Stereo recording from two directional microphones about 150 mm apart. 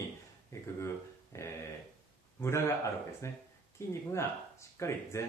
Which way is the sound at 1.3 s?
20° left (ahead or behind).